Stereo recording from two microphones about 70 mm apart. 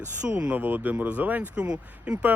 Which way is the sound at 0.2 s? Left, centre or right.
Right.